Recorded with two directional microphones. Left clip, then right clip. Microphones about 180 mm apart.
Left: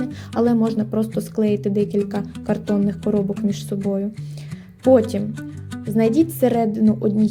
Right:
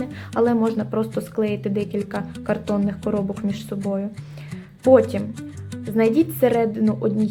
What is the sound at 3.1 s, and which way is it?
Speech, 25° left (ahead or behind).